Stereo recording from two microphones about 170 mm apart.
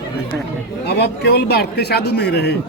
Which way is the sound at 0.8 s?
70° left (ahead or behind).